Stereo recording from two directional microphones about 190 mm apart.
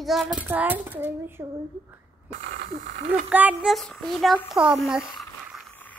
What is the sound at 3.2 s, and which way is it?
Speech, 5° right (ahead or behind).